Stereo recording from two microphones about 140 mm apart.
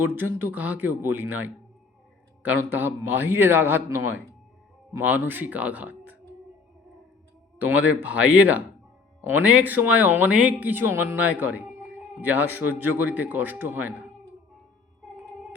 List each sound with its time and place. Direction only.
0.0 s speech: 15° right (ahead or behind)
7.7 s speech: 10° right (ahead or behind)